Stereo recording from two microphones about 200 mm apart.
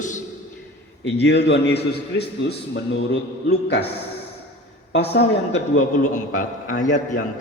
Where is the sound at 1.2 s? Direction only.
60° left (ahead or behind).